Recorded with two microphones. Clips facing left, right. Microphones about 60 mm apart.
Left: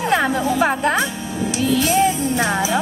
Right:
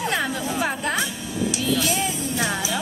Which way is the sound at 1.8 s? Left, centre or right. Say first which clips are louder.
Left 8 dB; left.